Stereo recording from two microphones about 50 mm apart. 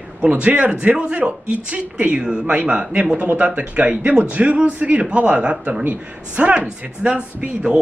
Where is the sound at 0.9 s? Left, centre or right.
Centre.